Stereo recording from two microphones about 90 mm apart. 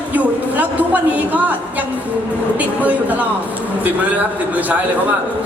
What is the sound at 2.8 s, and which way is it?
A man's voice, 15° right (ahead or behind).